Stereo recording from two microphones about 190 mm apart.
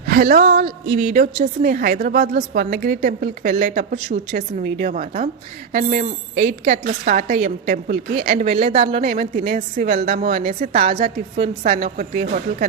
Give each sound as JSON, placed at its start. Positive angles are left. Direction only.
{"t": 0.0, "sound": "a woman's voice", "side_deg": -55}